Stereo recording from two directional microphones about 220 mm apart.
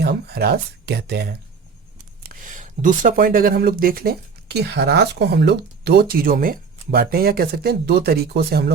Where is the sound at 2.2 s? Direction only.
35° right (ahead or behind).